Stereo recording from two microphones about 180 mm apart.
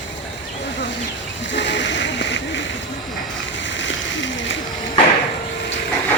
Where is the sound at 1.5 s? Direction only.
90° left.